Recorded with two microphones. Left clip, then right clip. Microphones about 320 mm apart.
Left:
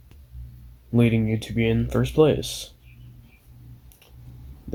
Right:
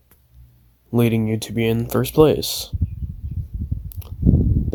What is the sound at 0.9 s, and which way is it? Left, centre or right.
Speech, right.